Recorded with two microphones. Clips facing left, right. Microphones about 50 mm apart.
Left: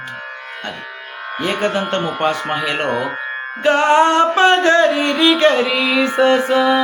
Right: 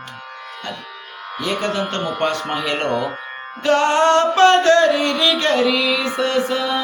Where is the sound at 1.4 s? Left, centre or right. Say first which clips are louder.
Left 3 dB; left.